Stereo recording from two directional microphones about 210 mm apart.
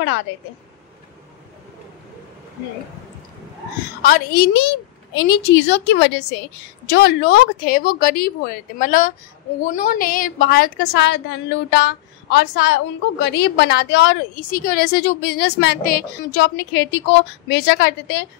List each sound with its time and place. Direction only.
4.0 s a woman's voice: 45° left (ahead or behind)